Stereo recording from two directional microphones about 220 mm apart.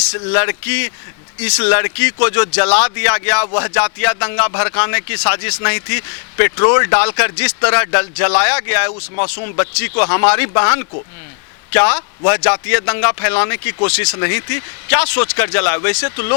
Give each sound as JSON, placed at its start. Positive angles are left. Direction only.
{"t": 0.3, "sound": "speech", "side_deg": 10}